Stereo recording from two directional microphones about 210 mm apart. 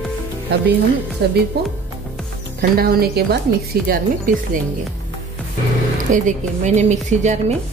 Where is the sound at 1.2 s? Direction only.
50° right (ahead or behind).